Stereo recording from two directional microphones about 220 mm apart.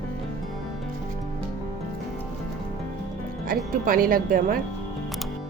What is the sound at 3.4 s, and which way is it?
Speech, 40° right (ahead or behind).